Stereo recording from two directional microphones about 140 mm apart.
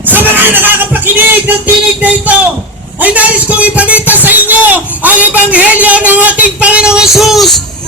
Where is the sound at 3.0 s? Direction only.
10° right (ahead or behind).